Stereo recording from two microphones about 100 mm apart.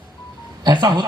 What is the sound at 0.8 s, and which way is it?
Speech, 45° right (ahead or behind).